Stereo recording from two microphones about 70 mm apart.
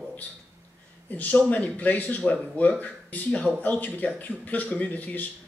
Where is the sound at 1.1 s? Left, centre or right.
Left.